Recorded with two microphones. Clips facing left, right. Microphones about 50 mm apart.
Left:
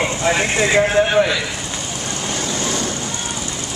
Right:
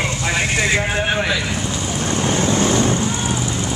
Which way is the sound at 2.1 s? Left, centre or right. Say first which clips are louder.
Right 6 dB; right.